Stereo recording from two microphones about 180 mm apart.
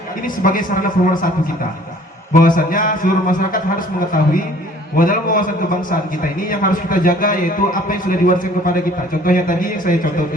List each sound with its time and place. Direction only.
0.3 s a man's voice: 50° left (ahead or behind)
2.3 s a man's voice: 50° left (ahead or behind)
6.5 s a man's voice: 50° left (ahead or behind)